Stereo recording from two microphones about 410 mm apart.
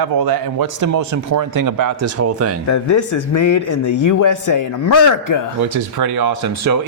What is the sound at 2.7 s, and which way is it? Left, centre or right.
A man's voice, left.